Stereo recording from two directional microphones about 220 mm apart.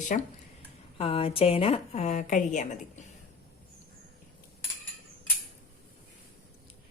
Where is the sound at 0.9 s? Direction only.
25° left (ahead or behind).